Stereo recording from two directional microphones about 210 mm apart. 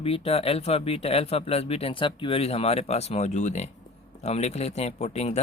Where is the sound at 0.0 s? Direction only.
25° left (ahead or behind).